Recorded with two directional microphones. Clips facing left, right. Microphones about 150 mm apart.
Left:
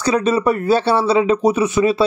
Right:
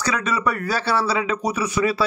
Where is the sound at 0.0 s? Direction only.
30° left (ahead or behind).